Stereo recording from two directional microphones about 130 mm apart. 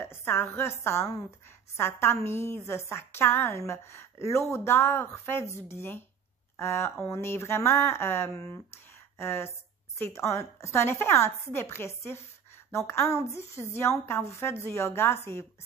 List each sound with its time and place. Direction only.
0.0 s a woman's voice: 15° left (ahead or behind)